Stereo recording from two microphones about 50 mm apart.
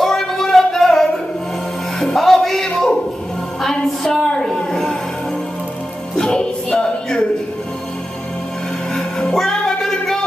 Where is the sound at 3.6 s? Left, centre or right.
Centre.